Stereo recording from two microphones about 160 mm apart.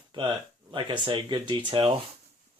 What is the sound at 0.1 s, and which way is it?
Speech, 30° right (ahead or behind).